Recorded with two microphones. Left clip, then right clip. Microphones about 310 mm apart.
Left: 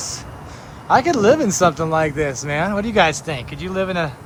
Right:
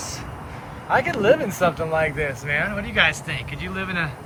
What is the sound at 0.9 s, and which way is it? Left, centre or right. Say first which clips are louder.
Speech: left 4 dB; left.